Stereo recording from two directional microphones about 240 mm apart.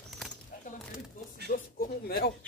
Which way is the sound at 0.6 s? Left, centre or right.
Left.